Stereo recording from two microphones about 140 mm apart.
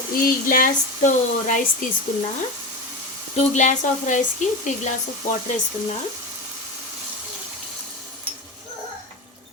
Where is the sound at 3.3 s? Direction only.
55° left (ahead or behind).